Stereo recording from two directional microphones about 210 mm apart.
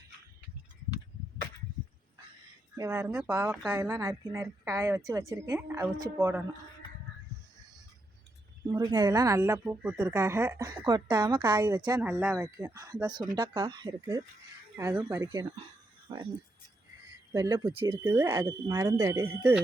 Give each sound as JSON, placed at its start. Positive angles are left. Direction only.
{"t": 2.7, "sound": "speech", "side_deg": -15}
{"t": 8.6, "sound": "speech", "side_deg": -20}
{"t": 17.3, "sound": "speech", "side_deg": -15}
{"t": 18.0, "sound": "speech", "side_deg": -10}